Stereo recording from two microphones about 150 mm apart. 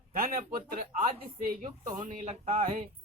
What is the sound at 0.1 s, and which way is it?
Speech, 75° right (ahead or behind).